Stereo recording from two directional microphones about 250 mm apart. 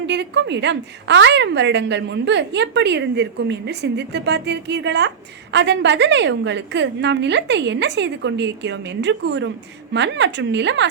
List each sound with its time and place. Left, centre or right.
0.1 s a woman's voice: right